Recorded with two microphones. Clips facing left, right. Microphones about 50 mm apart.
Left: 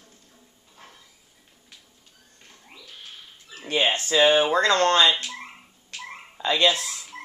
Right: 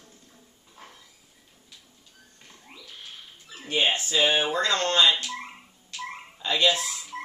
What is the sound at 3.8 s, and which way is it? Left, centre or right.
Speech, left.